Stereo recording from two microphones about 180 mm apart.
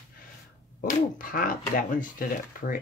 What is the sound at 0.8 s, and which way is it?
Speech, 50° left (ahead or behind).